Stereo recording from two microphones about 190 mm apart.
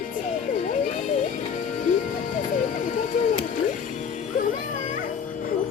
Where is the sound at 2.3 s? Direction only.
40° left (ahead or behind).